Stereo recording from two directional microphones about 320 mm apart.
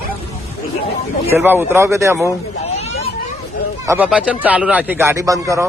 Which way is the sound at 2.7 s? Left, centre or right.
Centre.